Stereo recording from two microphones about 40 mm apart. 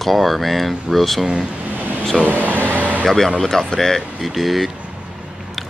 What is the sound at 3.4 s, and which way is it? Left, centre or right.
Speech, centre.